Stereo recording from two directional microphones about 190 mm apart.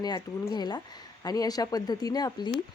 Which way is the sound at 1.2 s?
20° left (ahead or behind).